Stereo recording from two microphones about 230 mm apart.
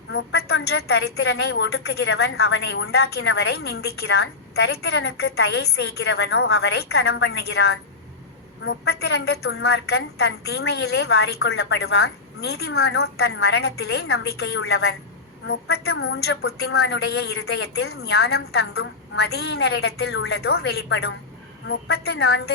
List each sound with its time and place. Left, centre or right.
0.1 s a woman's voice: left
12.7 s a woman's voice: left
13.4 s a woman's voice: left
15.7 s a woman's voice: left
16.6 s a man's voice: left
16.9 s a woman's voice: left